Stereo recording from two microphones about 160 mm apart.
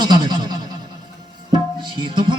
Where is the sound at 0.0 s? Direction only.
25° right (ahead or behind).